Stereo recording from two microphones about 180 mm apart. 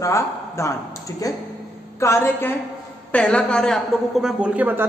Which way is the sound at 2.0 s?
15° left (ahead or behind).